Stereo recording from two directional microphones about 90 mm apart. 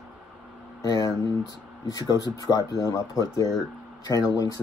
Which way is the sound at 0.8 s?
45° left (ahead or behind).